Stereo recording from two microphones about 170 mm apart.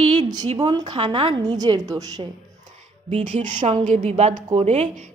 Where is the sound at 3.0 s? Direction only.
45° right (ahead or behind).